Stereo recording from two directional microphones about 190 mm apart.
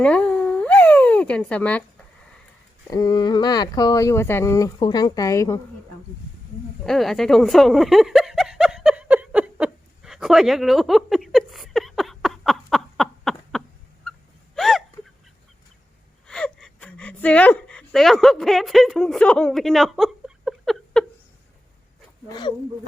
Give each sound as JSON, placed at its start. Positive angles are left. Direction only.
{"t": 0.0, "sound": "cat", "side_deg": 5}
{"t": 2.8, "sound": "speech", "side_deg": 20}
{"t": 6.8, "sound": "a sound", "side_deg": 0}
{"t": 14.5, "sound": "hiccup", "side_deg": 0}
{"t": 16.2, "sound": "whimper", "side_deg": 5}
{"t": 22.3, "sound": "speech", "side_deg": 25}